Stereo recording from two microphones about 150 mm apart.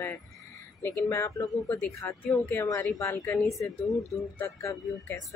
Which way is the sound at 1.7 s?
15° left (ahead or behind).